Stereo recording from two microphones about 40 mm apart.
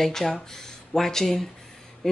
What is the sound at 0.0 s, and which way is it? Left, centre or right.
Speech, centre.